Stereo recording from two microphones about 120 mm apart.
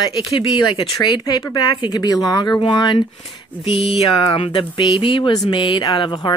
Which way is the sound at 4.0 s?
55° left (ahead or behind).